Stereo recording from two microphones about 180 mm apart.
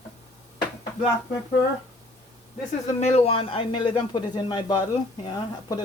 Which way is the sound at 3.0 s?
35° left (ahead or behind).